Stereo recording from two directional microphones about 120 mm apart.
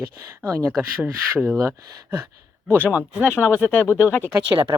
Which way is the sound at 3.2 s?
15° left (ahead or behind).